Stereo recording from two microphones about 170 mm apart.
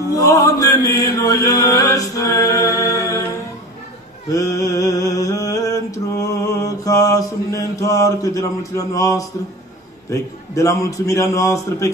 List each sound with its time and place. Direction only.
0.1 s chant: 20° left (ahead or behind)
4.3 s mantra: 20° left (ahead or behind)
10.0 s a man's voice: 15° left (ahead or behind)